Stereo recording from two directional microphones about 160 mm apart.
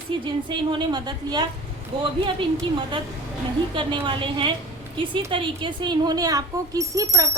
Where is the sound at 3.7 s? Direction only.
30° right (ahead or behind).